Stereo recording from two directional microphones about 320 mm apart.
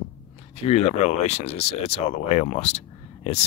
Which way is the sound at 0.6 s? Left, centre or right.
Centre.